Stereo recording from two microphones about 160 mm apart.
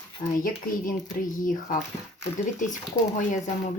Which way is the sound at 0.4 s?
55° left (ahead or behind).